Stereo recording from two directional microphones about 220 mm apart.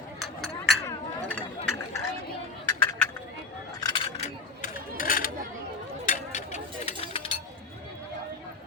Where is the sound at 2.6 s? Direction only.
10° left (ahead or behind).